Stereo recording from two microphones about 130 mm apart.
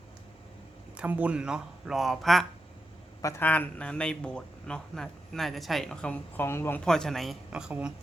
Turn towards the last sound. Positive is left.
turn(degrees=-5)  # may be behind; listen again after turning